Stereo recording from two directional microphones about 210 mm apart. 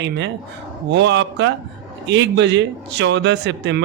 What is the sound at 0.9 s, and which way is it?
A man's voice, 55° right (ahead or behind).